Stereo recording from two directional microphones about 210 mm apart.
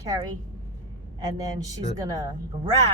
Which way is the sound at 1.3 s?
15° right (ahead or behind).